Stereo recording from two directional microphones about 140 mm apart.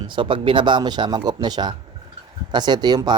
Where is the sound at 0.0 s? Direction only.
35° right (ahead or behind).